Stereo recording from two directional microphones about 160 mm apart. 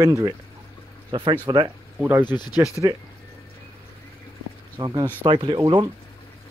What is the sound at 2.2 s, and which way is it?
Speech, 25° left (ahead or behind).